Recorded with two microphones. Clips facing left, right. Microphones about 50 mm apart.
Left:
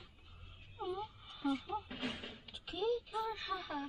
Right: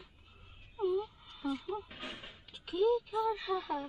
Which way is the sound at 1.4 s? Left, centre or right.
Centre.